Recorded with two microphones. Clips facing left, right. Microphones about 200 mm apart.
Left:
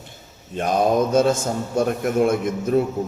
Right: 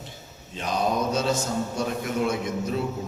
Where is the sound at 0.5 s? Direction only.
50° left (ahead or behind).